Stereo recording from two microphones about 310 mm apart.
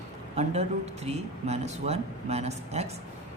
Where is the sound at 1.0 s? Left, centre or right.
Right.